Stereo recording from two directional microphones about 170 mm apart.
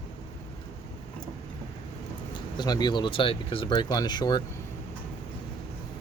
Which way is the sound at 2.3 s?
25° left (ahead or behind).